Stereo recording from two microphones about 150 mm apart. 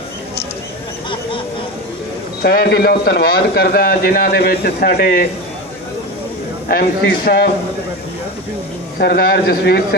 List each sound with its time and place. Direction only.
2.4 s a man's voice: 90° left
6.7 s a man's voice: 90° left
9.0 s a man's voice: 90° left